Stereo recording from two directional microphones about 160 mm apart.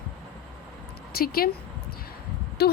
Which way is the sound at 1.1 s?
70° left (ahead or behind).